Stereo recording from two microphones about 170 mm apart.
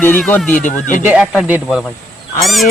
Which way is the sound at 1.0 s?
5° right (ahead or behind).